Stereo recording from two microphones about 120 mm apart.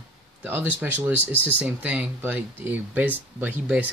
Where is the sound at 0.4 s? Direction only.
15° right (ahead or behind).